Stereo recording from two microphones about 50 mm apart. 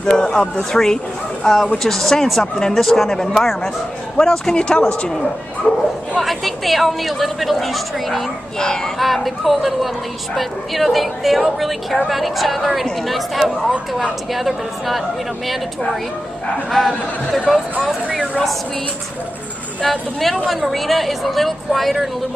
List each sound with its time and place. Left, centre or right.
0.0 s a man's voice: centre
6.2 s a woman's voice: centre
8.5 s a man's voice: centre
8.9 s a woman's voice: centre
16.7 s a woman's voice: centre
17.7 s speech: right
19.8 s a woman's voice: centre